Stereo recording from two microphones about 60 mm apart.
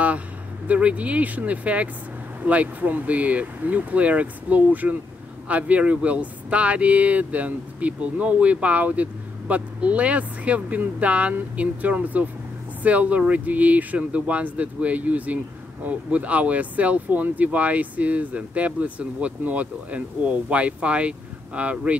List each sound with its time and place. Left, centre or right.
0.7 s speech: right